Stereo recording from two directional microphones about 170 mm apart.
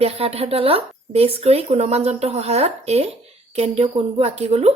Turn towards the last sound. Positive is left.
turn(degrees=-35)  # may be behind; listen again after turning